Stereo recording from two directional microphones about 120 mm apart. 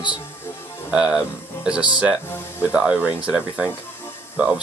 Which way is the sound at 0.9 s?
5° right (ahead or behind).